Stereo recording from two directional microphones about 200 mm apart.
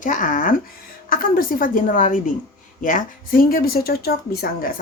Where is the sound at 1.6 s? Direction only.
45° left (ahead or behind).